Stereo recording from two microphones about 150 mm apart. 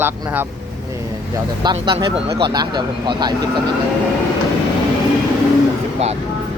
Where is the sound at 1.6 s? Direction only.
30° right (ahead or behind).